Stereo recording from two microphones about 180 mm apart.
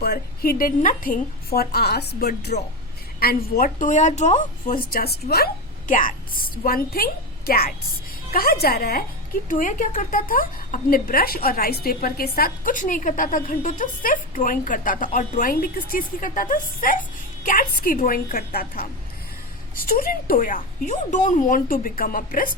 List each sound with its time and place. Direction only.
0.0 s a woman's voice: 60° left (ahead or behind)
5.9 s a woman's voice: 50° left (ahead or behind)
9.5 s a woman's voice: 45° left (ahead or behind)